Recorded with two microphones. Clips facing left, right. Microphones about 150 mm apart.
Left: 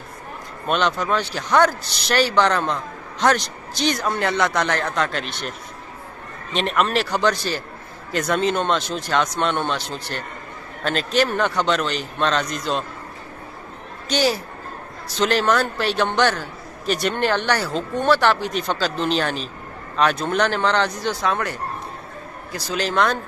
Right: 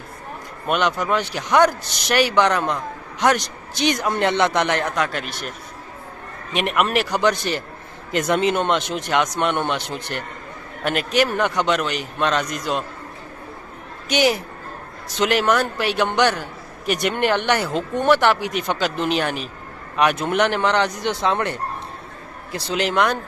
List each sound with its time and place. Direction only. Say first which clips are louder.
0.7 s speech: even; 10° right (ahead or behind)
6.5 s speech: even; 10° right (ahead or behind)
14.0 s a man's voice: right 2 dB; 15° right (ahead or behind)